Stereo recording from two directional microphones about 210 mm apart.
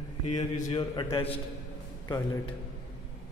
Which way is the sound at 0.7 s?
20° left (ahead or behind).